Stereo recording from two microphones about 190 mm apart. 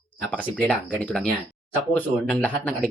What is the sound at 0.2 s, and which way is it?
Speech, 5° left (ahead or behind).